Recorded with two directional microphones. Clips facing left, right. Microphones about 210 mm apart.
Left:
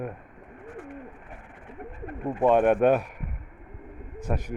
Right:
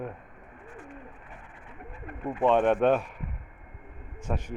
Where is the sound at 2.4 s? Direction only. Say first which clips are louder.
Left 2 dB; 10° left (ahead or behind).